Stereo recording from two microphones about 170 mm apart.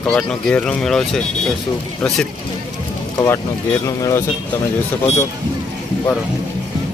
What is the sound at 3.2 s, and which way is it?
Speech, 15° left (ahead or behind).